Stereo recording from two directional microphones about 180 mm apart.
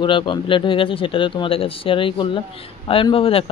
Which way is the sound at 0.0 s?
25° left (ahead or behind).